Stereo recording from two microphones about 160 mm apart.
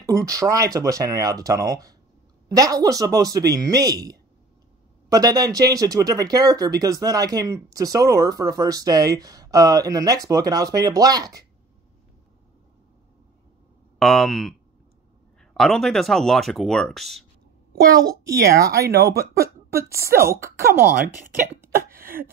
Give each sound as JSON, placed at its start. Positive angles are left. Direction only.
{"t": 0.0, "sound": "speech", "side_deg": -20}
{"t": 13.9, "sound": "speech", "side_deg": 0}
{"t": 15.5, "sound": "speech", "side_deg": 0}
{"t": 18.5, "sound": "speech", "side_deg": -20}
{"t": 18.8, "sound": "speech", "side_deg": -80}
{"t": 19.3, "sound": "a sound", "side_deg": -20}
{"t": 20.2, "sound": "speech", "side_deg": -15}